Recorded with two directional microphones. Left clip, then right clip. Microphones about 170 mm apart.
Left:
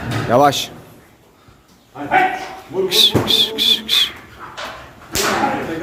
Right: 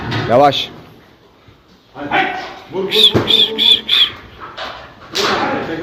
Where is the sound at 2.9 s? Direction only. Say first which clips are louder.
Right 3 dB; 30° left (ahead or behind).